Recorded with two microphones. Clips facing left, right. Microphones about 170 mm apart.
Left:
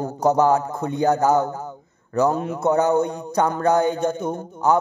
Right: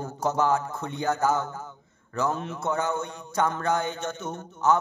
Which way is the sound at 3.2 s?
35° left (ahead or behind).